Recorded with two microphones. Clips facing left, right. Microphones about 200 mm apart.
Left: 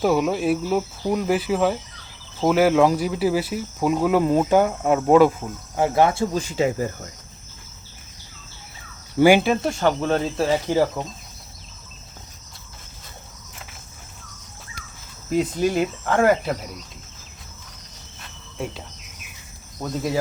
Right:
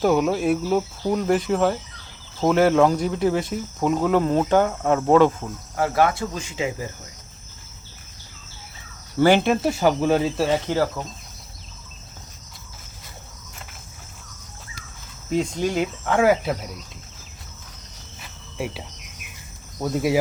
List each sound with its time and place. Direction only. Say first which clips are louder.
0.0 s speech: right 1 dB; centre (ahead or behind); by 7.1 s 45° left (ahead or behind)
9.1 s speech: left 2 dB; 10° left (ahead or behind)
11.0 s speech: left 2 dB; 15° left (ahead or behind)
15.3 s speech: left 2 dB; 5° left (ahead or behind)
18.2 s cricket: right 1 dB; 5° right (ahead or behind)
19.8 s speech: right 3 dB; 5° right (ahead or behind)